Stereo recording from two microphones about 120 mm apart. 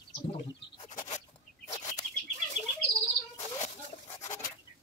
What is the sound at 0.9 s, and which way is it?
Bird, 80° left.